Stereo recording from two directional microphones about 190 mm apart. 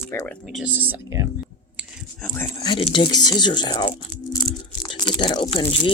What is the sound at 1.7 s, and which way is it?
Whispering, 5° left (ahead or behind).